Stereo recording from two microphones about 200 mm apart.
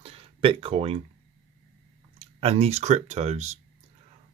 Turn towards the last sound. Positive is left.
turn(degrees=-35)  # may be behind; listen again after turning